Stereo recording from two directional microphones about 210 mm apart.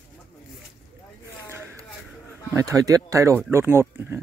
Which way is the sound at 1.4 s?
10° right (ahead or behind).